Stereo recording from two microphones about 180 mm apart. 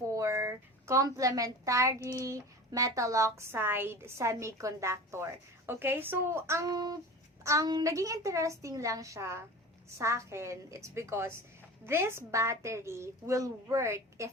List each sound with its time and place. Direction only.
0.1 s a sound: 15° right (ahead or behind)
2.0 s a child's voice: 15° left (ahead or behind)
2.2 s a woman's voice: 15° right (ahead or behind)